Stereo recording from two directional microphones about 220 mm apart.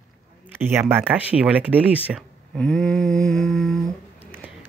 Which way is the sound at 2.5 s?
5° left (ahead or behind).